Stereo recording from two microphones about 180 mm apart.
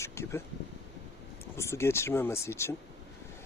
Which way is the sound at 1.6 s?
15° left (ahead or behind).